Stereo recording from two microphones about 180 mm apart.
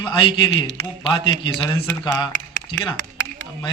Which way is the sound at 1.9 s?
10° left (ahead or behind).